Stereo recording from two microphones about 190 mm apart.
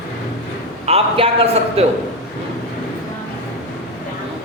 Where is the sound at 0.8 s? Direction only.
30° right (ahead or behind).